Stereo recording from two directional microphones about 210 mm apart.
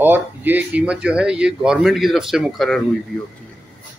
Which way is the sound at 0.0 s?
10° right (ahead or behind).